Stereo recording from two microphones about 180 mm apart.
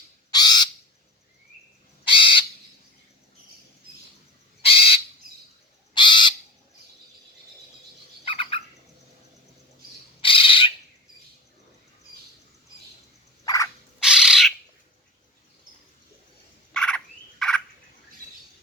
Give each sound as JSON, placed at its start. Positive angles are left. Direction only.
{"t": 0.3, "sound": "bird", "side_deg": 25}
{"t": 2.0, "sound": "crow", "side_deg": 30}
{"t": 4.6, "sound": "bird", "side_deg": 30}
{"t": 5.9, "sound": "crow", "side_deg": 25}
{"t": 8.2, "sound": "bird", "side_deg": 30}
{"t": 10.2, "sound": "bird", "side_deg": 30}
{"t": 13.4, "sound": "a sound", "side_deg": 20}
{"t": 14.0, "sound": "bird", "side_deg": -5}
{"t": 16.7, "sound": "frog", "side_deg": 5}